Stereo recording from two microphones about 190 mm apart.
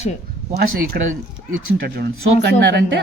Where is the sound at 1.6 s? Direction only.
75° right (ahead or behind).